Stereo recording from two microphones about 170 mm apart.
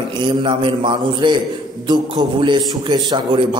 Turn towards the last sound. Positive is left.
turn(degrees=-30)  # may be behind; listen again after turning